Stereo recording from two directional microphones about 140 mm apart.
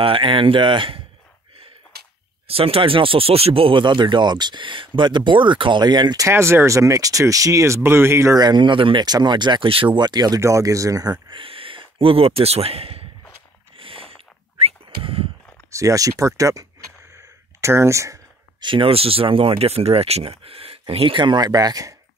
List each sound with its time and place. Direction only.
0.0 s speech: 40° right (ahead or behind)
2.4 s speech: 45° right (ahead or behind)
6.2 s speech: 20° right (ahead or behind); by 13.0 s 45° right (ahead or behind)
13.7 s a sound: 40° right (ahead or behind)
15.7 s speech: 25° right (ahead or behind)
17.6 s a sound: 20° right (ahead or behind)
18.7 s speech: 40° right (ahead or behind)